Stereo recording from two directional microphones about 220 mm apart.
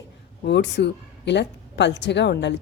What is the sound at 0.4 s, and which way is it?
A woman's voice, 50° left (ahead or behind).